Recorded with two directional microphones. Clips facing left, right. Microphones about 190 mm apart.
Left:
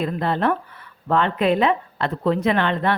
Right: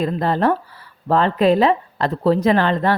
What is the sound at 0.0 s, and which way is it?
Speech, 40° right (ahead or behind).